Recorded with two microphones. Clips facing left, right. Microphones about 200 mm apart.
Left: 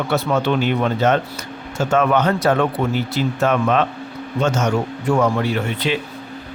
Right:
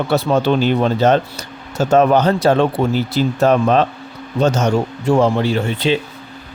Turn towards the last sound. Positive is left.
turn(degrees=-30)  # may be behind; listen again after turning